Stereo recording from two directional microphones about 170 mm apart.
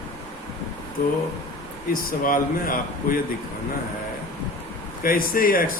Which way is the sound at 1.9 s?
55° left (ahead or behind).